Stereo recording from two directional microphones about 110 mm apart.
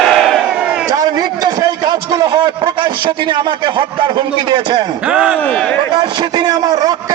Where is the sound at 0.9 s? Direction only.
40° right (ahead or behind).